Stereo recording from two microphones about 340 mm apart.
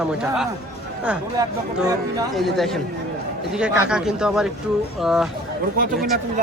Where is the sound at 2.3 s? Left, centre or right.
Centre.